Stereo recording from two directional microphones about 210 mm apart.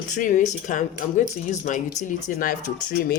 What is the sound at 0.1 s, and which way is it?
Speech, 35° left (ahead or behind).